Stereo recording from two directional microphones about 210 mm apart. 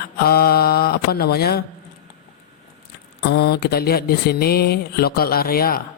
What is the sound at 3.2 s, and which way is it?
Speech, 50° left (ahead or behind).